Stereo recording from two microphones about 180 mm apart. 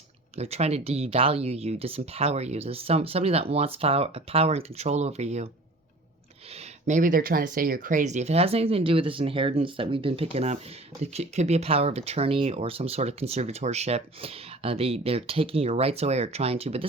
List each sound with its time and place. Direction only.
0.3 s speech: 35° right (ahead or behind)
6.5 s speech: 40° right (ahead or behind)